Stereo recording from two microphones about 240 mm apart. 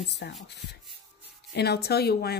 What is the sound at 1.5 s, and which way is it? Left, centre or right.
Speech, left.